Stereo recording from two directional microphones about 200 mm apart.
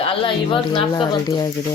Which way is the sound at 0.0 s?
25° left (ahead or behind).